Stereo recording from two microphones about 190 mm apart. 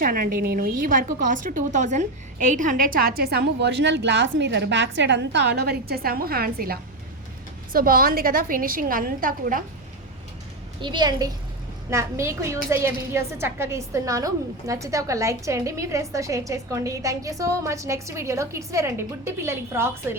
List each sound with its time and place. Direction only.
0.0 s a woman's voice: 50° right (ahead or behind)
10.8 s a woman's voice: 25° right (ahead or behind)